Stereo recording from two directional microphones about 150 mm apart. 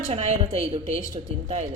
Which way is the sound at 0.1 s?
45° right (ahead or behind).